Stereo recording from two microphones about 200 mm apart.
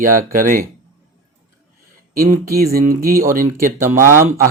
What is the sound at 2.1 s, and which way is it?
Speech, 45° right (ahead or behind).